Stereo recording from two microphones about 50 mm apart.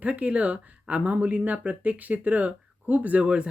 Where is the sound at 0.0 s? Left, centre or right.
Right.